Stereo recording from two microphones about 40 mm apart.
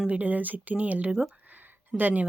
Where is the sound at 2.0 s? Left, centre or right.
Right.